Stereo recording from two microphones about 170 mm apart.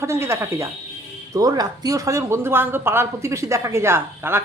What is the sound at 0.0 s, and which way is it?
Speech, 15° right (ahead or behind).